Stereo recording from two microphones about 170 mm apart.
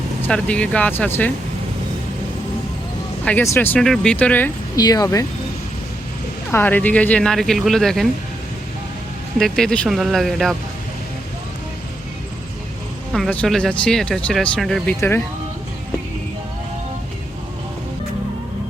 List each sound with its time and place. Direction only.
0.2 s speech: 5° left (ahead or behind)
3.2 s speech: 15° left (ahead or behind)
4.8 s speech: 20° left (ahead or behind)
6.5 s speech: 10° left (ahead or behind)
9.4 s speech: 5° left (ahead or behind)
13.1 s speech: 5° left (ahead or behind)